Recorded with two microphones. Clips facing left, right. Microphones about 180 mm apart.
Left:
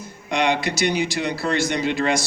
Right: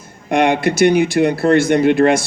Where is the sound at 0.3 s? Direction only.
55° right (ahead or behind).